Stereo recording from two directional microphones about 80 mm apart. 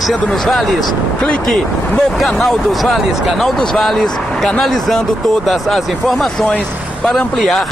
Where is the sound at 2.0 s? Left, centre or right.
Centre.